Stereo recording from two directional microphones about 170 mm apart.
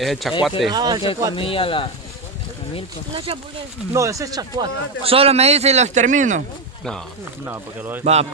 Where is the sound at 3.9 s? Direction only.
20° right (ahead or behind).